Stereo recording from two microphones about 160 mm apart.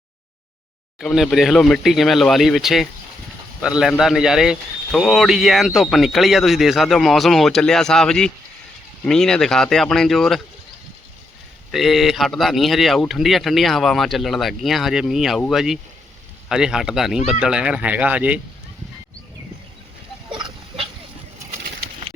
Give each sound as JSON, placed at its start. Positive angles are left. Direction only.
{"t": 0.9, "sound": "a man's voice", "side_deg": 0}
{"t": 11.7, "sound": "a man's voice", "side_deg": 0}
{"t": 20.3, "sound": "goat", "side_deg": -30}